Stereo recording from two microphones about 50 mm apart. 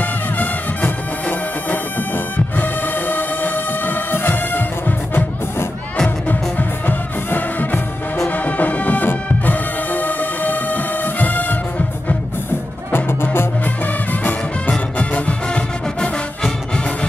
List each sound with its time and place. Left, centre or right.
0.0 s music: left
12.9 s music: left
15.0 s music: left